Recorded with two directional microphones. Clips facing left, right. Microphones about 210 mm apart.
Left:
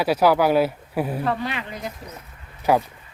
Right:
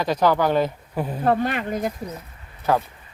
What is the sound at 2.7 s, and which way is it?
Speech, 10° left (ahead or behind).